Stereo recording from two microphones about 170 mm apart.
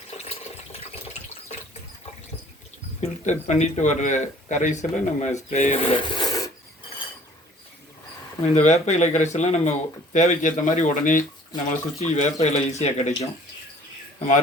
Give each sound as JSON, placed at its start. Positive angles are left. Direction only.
{"t": 0.3, "sound": "water", "side_deg": 35}
{"t": 3.0, "sound": "speech", "side_deg": 45}
{"t": 8.5, "sound": "speech", "side_deg": 45}